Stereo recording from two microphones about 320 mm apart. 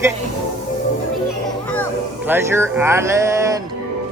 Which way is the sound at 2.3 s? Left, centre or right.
Centre.